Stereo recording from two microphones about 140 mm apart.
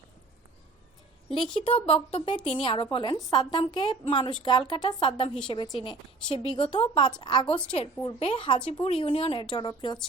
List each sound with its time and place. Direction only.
1.6 s speech: 45° left (ahead or behind)